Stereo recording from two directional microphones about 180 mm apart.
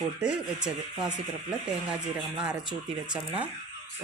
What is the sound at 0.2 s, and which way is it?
Speech, 5° right (ahead or behind).